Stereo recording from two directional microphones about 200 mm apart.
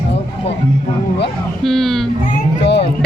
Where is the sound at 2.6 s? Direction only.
60° left (ahead or behind).